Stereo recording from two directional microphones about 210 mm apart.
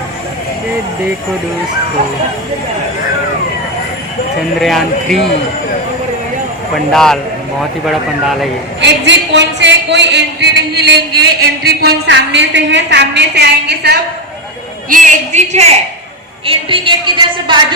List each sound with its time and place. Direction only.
4.6 s speech: centre (ahead or behind)
6.9 s speech: centre (ahead or behind)
8.8 s a woman's voice: 55° right (ahead or behind)
14.8 s a woman's voice: 40° right (ahead or behind); by 17.7 s 20° right (ahead or behind)